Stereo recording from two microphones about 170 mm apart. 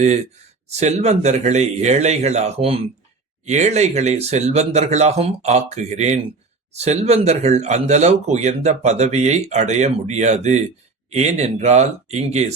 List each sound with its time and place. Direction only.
0.7 s speech: 40° right (ahead or behind)